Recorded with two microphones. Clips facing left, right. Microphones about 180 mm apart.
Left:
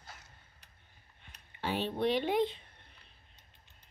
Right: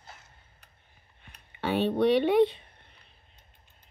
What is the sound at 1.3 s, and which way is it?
Speech, 65° right (ahead or behind).